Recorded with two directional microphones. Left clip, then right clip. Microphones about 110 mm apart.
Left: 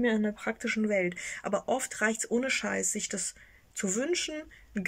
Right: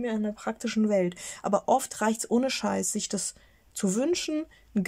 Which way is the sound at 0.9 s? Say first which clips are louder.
Right 3 dB; 40° right (ahead or behind).